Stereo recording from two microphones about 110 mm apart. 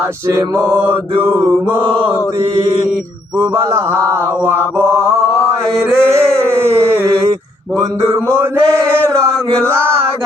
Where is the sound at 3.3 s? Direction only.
25° right (ahead or behind).